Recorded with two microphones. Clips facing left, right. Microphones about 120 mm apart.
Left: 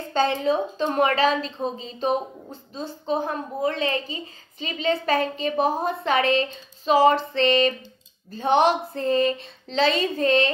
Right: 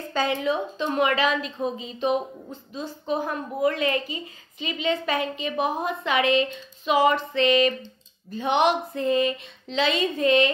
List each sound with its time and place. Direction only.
0.4 s a woman's voice: 35° left (ahead or behind)